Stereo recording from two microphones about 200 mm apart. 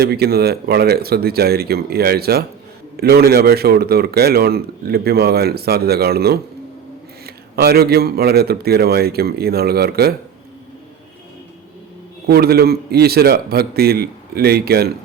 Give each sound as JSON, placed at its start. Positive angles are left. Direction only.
{"t": 0.0, "sound": "a man's voice", "side_deg": -50}
{"t": 12.3, "sound": "a man's voice", "side_deg": -50}